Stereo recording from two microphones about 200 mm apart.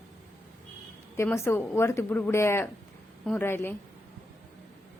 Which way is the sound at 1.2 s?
15° left (ahead or behind).